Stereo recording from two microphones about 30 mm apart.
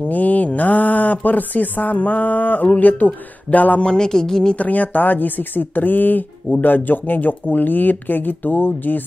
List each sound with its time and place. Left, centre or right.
0.1 s mantra: left
3.8 s speech: left
4.6 s speech: left